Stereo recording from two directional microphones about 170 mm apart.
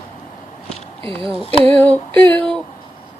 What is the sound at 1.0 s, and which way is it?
Speech, 30° right (ahead or behind).